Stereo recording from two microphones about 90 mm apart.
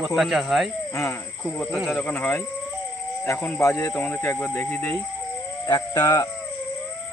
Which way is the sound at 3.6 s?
35° left (ahead or behind).